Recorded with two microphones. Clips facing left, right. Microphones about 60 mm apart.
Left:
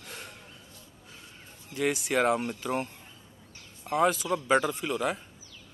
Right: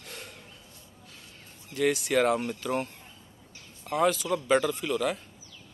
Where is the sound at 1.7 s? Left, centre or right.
Centre.